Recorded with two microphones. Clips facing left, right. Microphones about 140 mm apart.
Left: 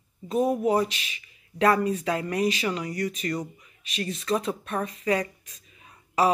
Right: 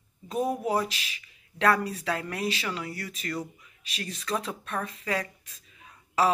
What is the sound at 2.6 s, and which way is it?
Speech, 10° left (ahead or behind).